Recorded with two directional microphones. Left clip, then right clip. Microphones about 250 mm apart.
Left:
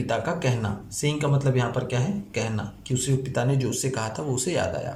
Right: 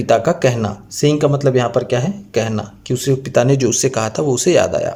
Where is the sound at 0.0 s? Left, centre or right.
Right.